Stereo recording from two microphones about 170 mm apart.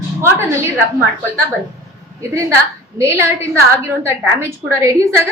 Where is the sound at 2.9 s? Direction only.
15° right (ahead or behind).